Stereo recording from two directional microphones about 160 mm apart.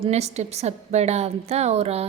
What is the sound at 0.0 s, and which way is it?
A woman's voice, 40° right (ahead or behind).